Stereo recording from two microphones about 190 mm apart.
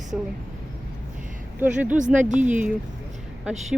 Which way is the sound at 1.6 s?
10° right (ahead or behind).